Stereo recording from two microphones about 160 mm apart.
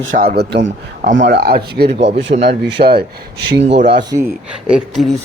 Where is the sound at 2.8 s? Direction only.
55° right (ahead or behind).